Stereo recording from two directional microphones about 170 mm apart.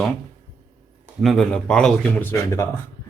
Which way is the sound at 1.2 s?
Centre (ahead or behind).